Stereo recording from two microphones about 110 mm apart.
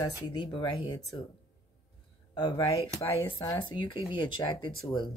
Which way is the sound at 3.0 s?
25° left (ahead or behind).